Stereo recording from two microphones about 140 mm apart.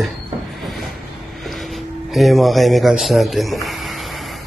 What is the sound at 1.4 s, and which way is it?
Speech, centre (ahead or behind).